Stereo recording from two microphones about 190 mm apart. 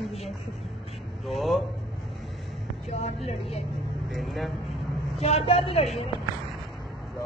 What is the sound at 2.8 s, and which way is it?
Speech, 30° left (ahead or behind).